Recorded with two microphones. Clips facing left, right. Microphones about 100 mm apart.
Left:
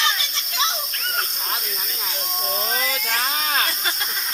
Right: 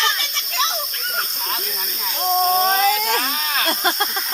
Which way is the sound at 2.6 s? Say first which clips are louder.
Right 9 dB; 50° right (ahead or behind).